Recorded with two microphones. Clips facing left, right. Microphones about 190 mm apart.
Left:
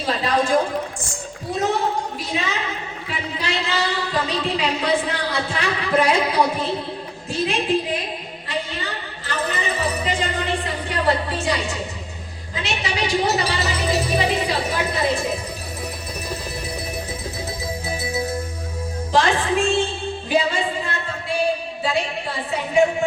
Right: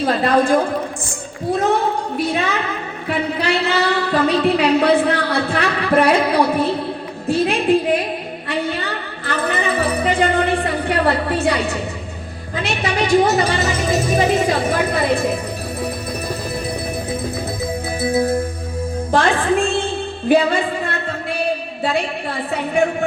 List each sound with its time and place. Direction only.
0.0 s a woman's voice: 55° right (ahead or behind)
2.1 s music: 60° right (ahead or behind)
3.1 s a woman's voice: 60° right (ahead or behind)
8.4 s music: 60° right (ahead or behind)
12.5 s a woman's voice: 55° right (ahead or behind)
17.6 s music: 55° right (ahead or behind)
19.1 s a woman's voice: 55° right (ahead or behind)
20.2 s music: 55° right (ahead or behind)
22.7 s a woman's voice: 55° right (ahead or behind)